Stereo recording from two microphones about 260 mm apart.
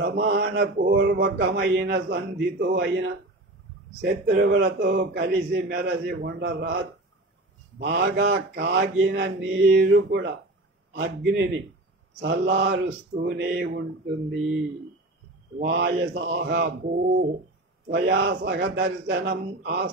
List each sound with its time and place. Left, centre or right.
0.1 s mantra: right
7.8 s mantra: right
10.9 s a man's voice: right
12.2 s mantra: right
15.6 s mantra: right
17.9 s mantra: right